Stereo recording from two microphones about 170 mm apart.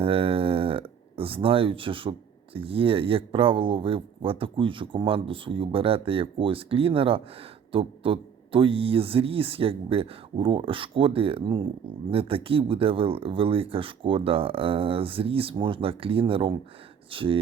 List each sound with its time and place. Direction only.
0.0 s speech: 35° right (ahead or behind)